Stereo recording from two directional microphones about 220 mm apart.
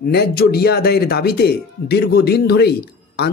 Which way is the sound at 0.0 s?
45° left (ahead or behind).